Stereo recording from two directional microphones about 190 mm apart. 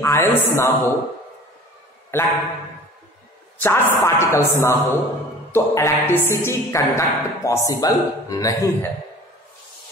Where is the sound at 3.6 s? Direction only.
10° left (ahead or behind).